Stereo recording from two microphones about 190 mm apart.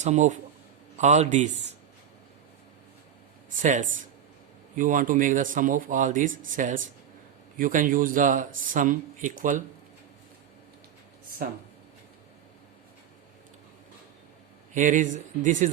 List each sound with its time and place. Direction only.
0.0 s speech: 40° right (ahead or behind)
3.5 s speech: 40° right (ahead or behind)
11.4 s speech: 45° right (ahead or behind)
14.7 s speech: 40° right (ahead or behind)